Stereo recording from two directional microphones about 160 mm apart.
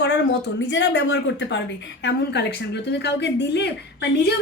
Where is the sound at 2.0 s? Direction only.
90° left.